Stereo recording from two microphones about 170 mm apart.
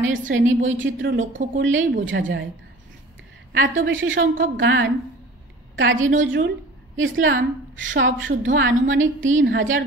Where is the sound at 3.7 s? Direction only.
90° right.